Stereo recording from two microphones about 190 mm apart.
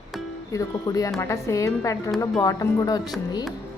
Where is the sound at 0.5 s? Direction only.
20° left (ahead or behind).